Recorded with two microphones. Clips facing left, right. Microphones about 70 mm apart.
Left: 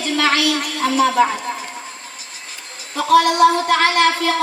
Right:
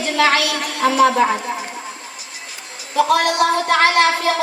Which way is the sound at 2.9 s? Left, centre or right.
Right.